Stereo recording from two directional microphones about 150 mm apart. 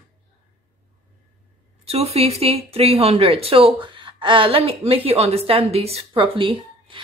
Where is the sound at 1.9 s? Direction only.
45° right (ahead or behind).